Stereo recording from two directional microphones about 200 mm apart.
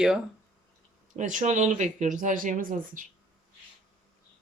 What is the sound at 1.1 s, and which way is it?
Speech, 40° right (ahead or behind).